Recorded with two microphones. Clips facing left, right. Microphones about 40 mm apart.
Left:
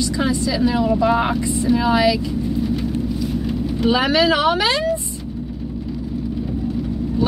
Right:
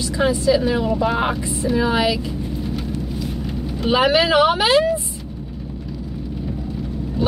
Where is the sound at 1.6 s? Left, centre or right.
Right.